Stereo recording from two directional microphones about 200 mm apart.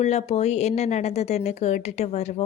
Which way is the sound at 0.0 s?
35° left (ahead or behind).